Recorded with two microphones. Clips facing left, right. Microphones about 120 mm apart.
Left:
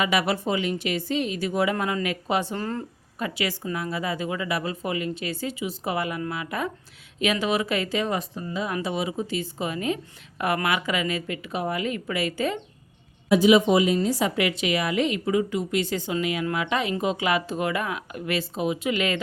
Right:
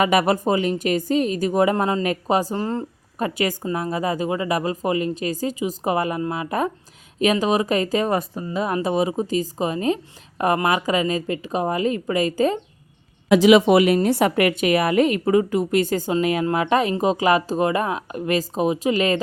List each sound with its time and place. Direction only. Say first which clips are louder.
0.0 s a woman's voice: right 6 dB; 45° right (ahead or behind)
1.7 s a woman's voice: right 5 dB; 35° right (ahead or behind)
2.6 s speech: right 5 dB; 25° right (ahead or behind)
3.2 s a woman's voice: right 5 dB; 45° right (ahead or behind)
13.2 s a woman's voice: right 4 dB; 90° right; by 19.2 s 35° right (ahead or behind)